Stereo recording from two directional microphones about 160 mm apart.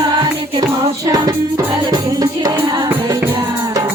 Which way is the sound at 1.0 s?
25° right (ahead or behind).